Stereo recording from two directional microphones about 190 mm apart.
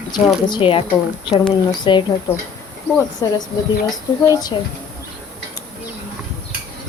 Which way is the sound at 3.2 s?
15° left (ahead or behind).